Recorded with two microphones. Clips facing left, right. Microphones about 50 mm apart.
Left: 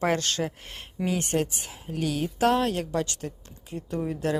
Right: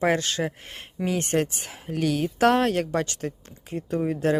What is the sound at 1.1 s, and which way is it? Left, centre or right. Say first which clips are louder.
Speech: right 2 dB; right.